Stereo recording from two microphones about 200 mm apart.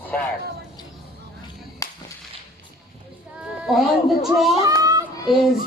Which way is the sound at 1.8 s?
15° left (ahead or behind).